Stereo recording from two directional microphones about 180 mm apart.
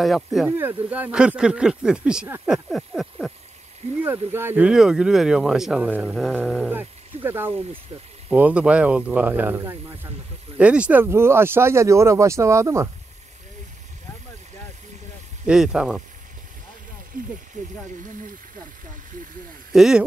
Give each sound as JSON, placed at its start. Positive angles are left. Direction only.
{"t": 0.0, "sound": "speech", "side_deg": 0}
{"t": 0.5, "sound": "speech", "side_deg": -10}
{"t": 4.0, "sound": "speech", "side_deg": -10}
{"t": 15.4, "sound": "speech", "side_deg": -5}
{"t": 17.1, "sound": "speech", "side_deg": -50}
{"t": 19.7, "sound": "speech", "side_deg": -5}